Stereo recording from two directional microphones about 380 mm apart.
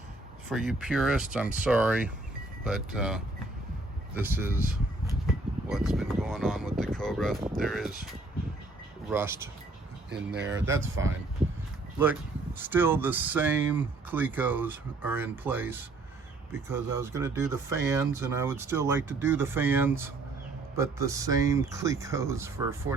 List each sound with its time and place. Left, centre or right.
0.5 s speech: centre
9.0 s speech: centre
10.3 s speech: right
12.5 s speech: centre